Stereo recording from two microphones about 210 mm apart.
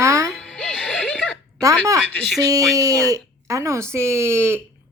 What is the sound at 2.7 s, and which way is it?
Speech, 15° right (ahead or behind).